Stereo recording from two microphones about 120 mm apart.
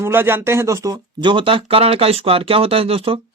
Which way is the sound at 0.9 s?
40° right (ahead or behind).